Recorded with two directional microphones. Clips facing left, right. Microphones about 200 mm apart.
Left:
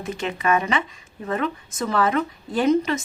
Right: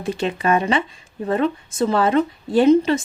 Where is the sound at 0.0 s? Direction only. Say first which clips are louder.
Right 4 dB; 30° right (ahead or behind).